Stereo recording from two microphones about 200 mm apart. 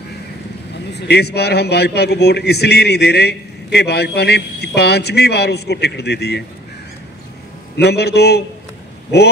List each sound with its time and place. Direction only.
0.9 s a man's voice: 55° left (ahead or behind)
7.7 s a man's voice: 55° left (ahead or behind)